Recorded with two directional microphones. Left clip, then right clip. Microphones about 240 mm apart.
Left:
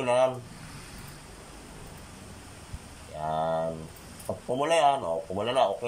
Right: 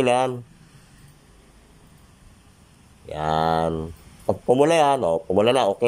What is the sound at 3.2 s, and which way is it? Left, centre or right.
A man's voice, right.